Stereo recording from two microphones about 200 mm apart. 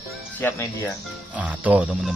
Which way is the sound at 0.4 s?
15° left (ahead or behind).